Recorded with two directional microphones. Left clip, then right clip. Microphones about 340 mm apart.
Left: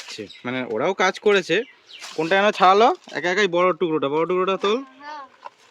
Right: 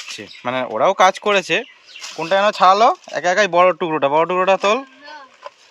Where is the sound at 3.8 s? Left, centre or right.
Right.